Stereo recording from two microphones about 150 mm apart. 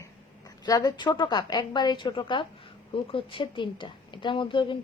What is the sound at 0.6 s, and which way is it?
A woman's voice, 25° left (ahead or behind).